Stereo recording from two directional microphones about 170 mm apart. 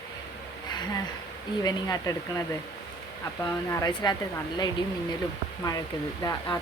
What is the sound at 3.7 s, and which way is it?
Speech, 20° left (ahead or behind).